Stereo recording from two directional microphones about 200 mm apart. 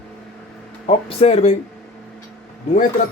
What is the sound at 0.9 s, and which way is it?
Speech, 30° left (ahead or behind).